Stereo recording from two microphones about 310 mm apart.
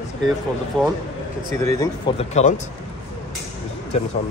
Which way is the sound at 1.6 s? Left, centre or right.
Centre.